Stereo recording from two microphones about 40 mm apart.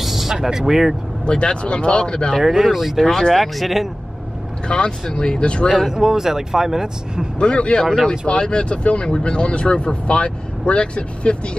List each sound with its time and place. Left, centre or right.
0.0 s vehicle: centre
1.2 s speech: left
2.4 s speech: centre
3.1 s speech: centre
4.6 s speech: left
5.9 s speech: centre
7.3 s speech: left
7.8 s speech: centre
8.1 s speech: left